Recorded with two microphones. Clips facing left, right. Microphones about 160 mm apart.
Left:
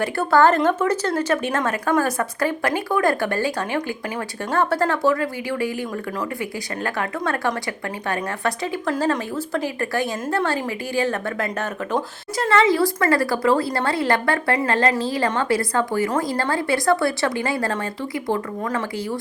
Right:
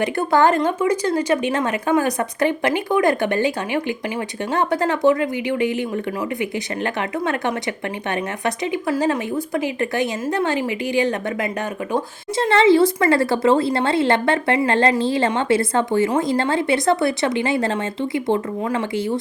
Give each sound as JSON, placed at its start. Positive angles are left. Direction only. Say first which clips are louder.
{"t": 0.0, "sound": "a woman's voice", "louder": "even", "side_deg": -20}
{"t": 6.8, "sound": "a woman's voice", "louder": "right 1 dB", "side_deg": -20}
{"t": 12.4, "sound": "speech", "louder": "right 4 dB", "side_deg": -30}